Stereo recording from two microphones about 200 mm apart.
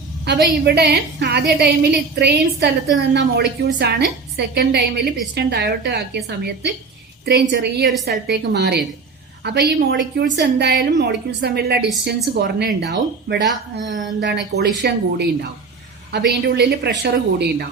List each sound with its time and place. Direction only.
0.3 s a woman's voice: 55° right (ahead or behind)